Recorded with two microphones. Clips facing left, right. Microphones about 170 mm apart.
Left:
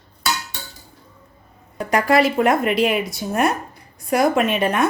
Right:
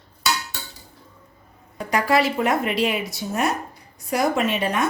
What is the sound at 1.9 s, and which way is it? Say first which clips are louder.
Speech: left 3 dB; 50° left (ahead or behind).